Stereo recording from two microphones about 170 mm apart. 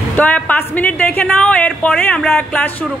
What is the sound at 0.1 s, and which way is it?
A woman's voice, 10° left (ahead or behind).